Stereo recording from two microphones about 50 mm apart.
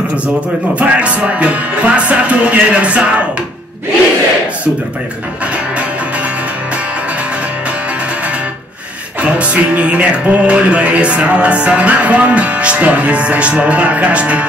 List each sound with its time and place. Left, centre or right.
0.7 s music: right
9.2 s music: right